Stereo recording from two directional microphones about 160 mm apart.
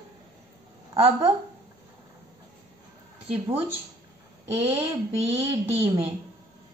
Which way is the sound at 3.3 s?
35° right (ahead or behind).